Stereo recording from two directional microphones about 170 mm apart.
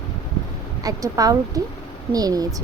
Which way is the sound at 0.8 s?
20° right (ahead or behind).